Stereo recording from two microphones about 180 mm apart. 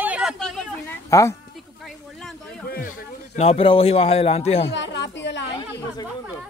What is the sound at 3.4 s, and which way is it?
Speech, 35° left (ahead or behind).